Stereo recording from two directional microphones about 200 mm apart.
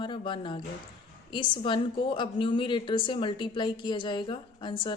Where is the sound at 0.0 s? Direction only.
25° left (ahead or behind).